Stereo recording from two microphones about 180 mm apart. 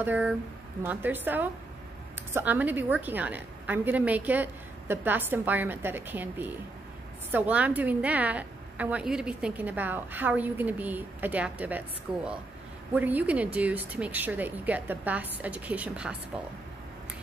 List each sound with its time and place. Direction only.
0.0 s a woman's voice: 10° right (ahead or behind)
12.9 s a woman's voice: 10° right (ahead or behind)